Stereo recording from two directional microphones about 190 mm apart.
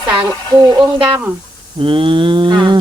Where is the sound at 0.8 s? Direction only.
30° right (ahead or behind).